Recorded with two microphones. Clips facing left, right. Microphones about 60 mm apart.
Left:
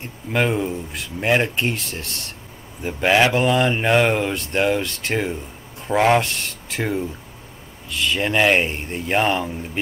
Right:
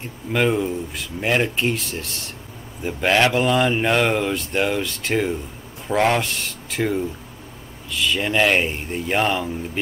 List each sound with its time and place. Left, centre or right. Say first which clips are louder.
0.3 s speech: right 1 dB; centre
7.9 s speech: even; centre